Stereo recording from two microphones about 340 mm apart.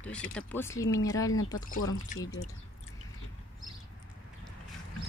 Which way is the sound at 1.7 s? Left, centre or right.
Left.